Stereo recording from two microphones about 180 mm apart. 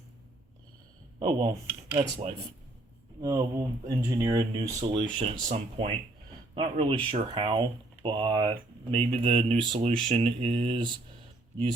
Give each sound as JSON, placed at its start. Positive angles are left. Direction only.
{"t": 1.2, "sound": "speech", "side_deg": -30}
{"t": 5.0, "sound": "speech", "side_deg": -40}
{"t": 6.5, "sound": "speech", "side_deg": -30}